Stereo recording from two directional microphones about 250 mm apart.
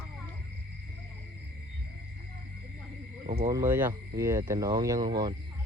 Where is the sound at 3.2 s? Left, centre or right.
Right.